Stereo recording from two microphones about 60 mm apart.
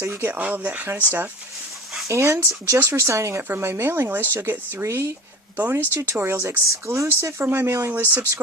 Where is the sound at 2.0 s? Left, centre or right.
Right.